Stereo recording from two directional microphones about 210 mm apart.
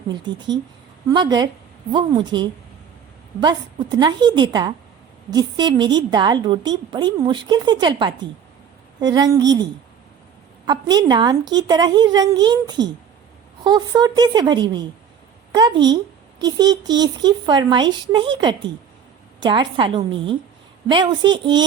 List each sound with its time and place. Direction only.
0.1 s a woman's voice: 20° right (ahead or behind)
10.7 s a woman's voice: 20° right (ahead or behind)